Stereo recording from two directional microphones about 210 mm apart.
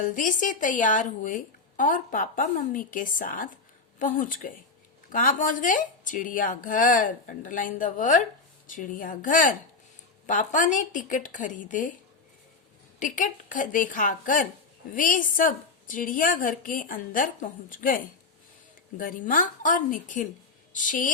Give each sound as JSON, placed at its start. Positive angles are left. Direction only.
{"t": 0.0, "sound": "a woman's voice", "side_deg": 40}
{"t": 13.0, "sound": "a woman's voice", "side_deg": 35}